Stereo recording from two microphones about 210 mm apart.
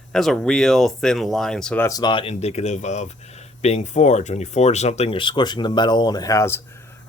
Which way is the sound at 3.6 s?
30° left (ahead or behind).